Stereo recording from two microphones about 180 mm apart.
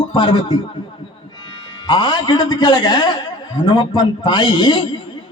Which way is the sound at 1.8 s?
25° left (ahead or behind).